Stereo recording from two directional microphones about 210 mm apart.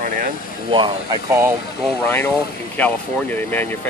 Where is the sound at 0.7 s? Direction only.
25° right (ahead or behind).